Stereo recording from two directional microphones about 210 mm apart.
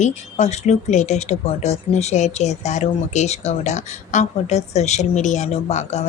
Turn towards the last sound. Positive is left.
turn(degrees=30)  # may be behind; listen again after turning